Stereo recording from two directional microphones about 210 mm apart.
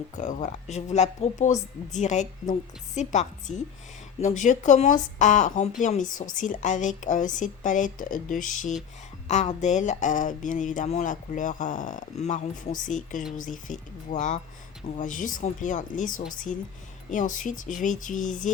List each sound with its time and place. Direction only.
0.2 s speech: 35° left (ahead or behind)